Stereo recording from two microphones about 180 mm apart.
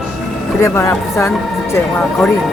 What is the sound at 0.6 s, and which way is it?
Speech, 15° left (ahead or behind).